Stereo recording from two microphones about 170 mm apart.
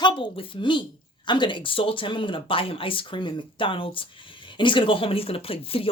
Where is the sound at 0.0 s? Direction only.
30° left (ahead or behind).